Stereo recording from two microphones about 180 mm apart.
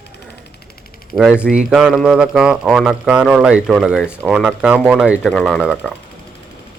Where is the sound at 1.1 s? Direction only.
5° right (ahead or behind).